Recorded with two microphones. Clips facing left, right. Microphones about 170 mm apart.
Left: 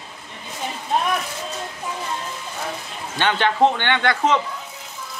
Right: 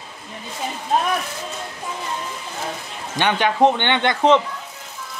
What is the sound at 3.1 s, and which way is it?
Speech, 15° right (ahead or behind).